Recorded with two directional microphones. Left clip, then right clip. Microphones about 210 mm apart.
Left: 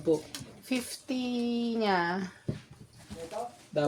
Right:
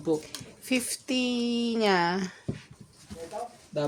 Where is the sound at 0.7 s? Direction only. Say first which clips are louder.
Right 5 dB; 40° right (ahead or behind).